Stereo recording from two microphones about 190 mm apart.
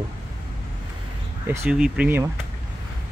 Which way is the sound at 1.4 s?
10° right (ahead or behind).